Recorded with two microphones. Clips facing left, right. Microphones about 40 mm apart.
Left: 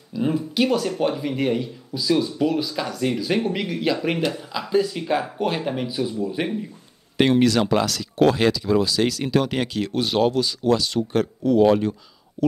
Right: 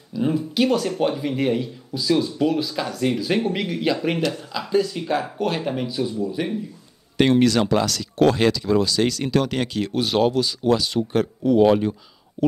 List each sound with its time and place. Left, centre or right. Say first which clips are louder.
0.2 s a sound: right 1 dB; centre
0.8 s speech: right 1 dB; centre
6.4 s speech: left 1 dB; left
7.2 s speech: right 1 dB; centre
12.4 s speech: right 1 dB; right